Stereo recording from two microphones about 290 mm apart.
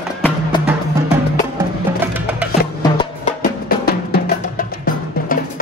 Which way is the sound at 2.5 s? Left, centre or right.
Left.